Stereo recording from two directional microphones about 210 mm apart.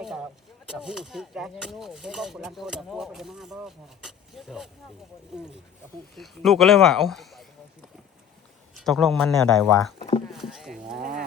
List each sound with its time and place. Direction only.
0.7 s speech: 5° right (ahead or behind)
6.1 s speech: centre (ahead or behind)
8.7 s speech: centre (ahead or behind)
10.0 s speech: 25° left (ahead or behind)
10.2 s speech: centre (ahead or behind)
10.9 s speech: 40° right (ahead or behind)